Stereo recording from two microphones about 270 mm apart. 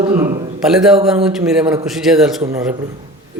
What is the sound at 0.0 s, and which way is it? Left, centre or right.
Speech, centre.